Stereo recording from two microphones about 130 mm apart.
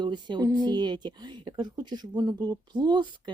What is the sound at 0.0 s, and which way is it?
A woman's voice, 35° right (ahead or behind).